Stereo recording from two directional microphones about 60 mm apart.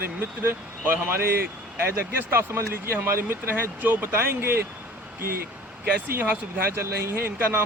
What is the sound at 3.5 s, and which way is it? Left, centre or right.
Speech, right.